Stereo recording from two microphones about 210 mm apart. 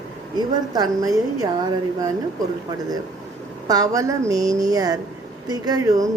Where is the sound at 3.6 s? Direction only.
15° right (ahead or behind).